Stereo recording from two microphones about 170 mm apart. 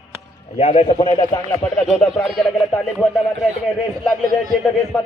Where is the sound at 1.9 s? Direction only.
Centre (ahead or behind).